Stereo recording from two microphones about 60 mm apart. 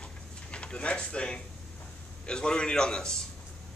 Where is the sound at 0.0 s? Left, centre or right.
Centre.